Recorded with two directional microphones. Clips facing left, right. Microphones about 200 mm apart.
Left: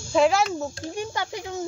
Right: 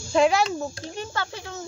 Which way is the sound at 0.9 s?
15° left (ahead or behind).